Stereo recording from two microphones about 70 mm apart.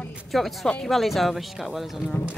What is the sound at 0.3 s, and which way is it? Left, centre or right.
Speech, centre.